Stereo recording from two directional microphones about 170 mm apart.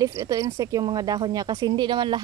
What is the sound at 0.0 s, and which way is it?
Speech, 20° right (ahead or behind).